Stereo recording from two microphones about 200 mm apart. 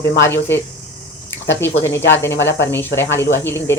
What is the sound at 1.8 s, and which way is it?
Speech, 10° left (ahead or behind).